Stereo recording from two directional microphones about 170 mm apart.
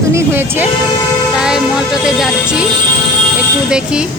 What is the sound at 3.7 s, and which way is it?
Music, 5° right (ahead or behind).